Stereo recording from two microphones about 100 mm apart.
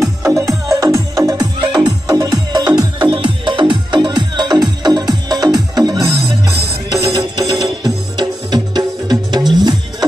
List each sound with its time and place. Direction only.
0.0 s music: 30° right (ahead or behind); by 10.0 s 45° right (ahead or behind)